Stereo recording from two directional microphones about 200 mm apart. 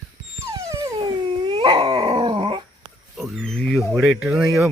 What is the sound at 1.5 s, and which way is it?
Dog, 25° right (ahead or behind).